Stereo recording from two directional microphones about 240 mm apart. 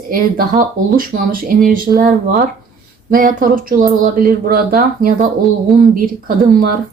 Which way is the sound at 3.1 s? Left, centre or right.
Right.